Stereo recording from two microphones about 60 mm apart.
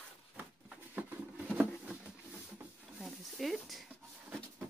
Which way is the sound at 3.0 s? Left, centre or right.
Centre.